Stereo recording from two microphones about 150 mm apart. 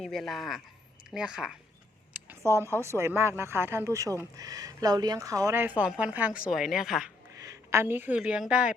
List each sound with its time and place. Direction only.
0.0 s speech: centre (ahead or behind)
2.3 s a woman's voice: 20° right (ahead or behind); by 7.1 s centre (ahead or behind)
7.3 s a woman's voice: 20° right (ahead or behind)